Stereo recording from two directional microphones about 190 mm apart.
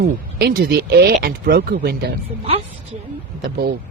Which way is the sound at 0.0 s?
55° right (ahead or behind).